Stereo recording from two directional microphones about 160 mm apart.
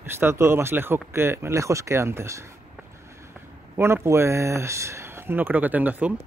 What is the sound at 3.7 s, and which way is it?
Speech, 15° right (ahead or behind).